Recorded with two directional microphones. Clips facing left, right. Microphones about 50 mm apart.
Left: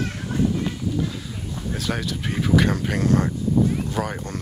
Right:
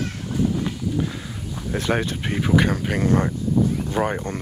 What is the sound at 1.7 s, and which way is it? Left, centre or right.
Speech, right.